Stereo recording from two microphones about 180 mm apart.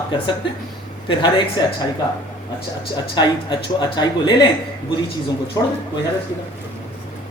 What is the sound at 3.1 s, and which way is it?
Speech, 25° left (ahead or behind).